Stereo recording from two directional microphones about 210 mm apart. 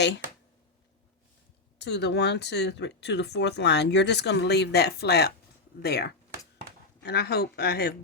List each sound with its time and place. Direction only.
1.8 s speech: 55° left (ahead or behind)